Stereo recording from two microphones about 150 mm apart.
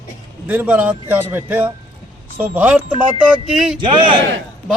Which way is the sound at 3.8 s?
35° right (ahead or behind).